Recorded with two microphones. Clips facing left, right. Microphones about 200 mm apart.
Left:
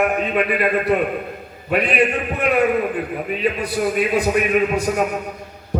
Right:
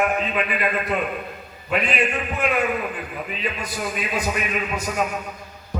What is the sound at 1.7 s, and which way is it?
A man's voice, 60° left (ahead or behind).